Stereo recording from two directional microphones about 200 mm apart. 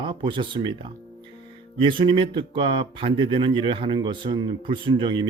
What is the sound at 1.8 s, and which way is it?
Speech, 25° right (ahead or behind).